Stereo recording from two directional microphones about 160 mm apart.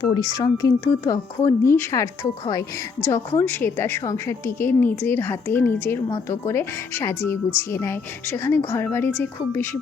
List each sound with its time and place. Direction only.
0.0 s a woman's voice: 25° left (ahead or behind)